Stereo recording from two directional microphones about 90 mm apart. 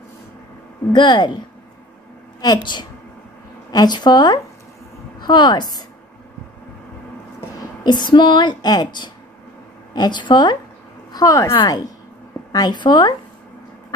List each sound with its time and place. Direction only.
0.9 s a woman's voice: 60° left (ahead or behind)
2.4 s a woman's voice: 55° left (ahead or behind)
7.8 s a woman's voice: 55° left (ahead or behind)
11.1 s a woman's voice: 45° left (ahead or behind)
11.5 s a woman's voice: 55° left (ahead or behind)